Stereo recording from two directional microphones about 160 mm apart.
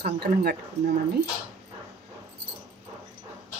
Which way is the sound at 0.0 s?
80° right.